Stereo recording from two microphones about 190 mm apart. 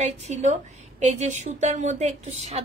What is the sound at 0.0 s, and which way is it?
A woman's voice, 35° right (ahead or behind).